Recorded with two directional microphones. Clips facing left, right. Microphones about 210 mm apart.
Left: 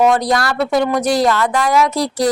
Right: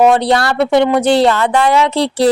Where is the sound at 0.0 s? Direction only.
30° right (ahead or behind).